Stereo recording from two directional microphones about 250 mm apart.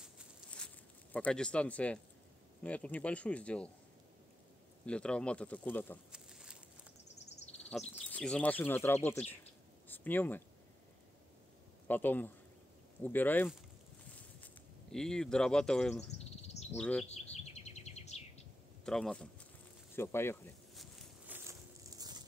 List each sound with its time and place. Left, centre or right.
0.0 s a sound: centre
1.1 s speech: centre
4.8 s speech: centre
7.1 s a sound: left
8.0 s speech: centre
11.9 s speech: centre
14.1 s a sound: centre
16.7 s speech: centre
17.0 s bird vocalization: left
18.9 s speech: centre
20.0 s insect: centre
21.5 s a sound: centre